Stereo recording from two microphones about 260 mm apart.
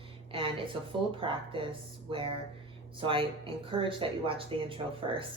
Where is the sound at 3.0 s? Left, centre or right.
Centre.